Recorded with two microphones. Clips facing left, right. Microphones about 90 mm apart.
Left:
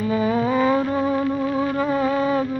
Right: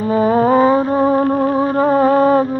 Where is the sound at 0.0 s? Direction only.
40° right (ahead or behind).